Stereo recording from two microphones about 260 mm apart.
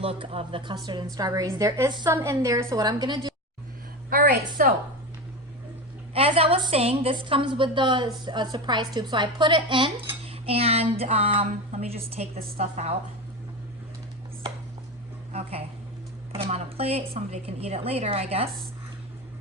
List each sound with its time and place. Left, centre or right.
0.0 s a woman's voice: right
4.6 s a woman's voice: right
6.1 s a woman's voice: right
15.3 s a woman's voice: right